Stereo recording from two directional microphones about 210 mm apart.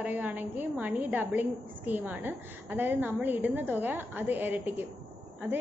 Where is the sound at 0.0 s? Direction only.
5° right (ahead or behind).